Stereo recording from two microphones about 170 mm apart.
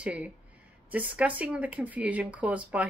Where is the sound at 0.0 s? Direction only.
10° right (ahead or behind).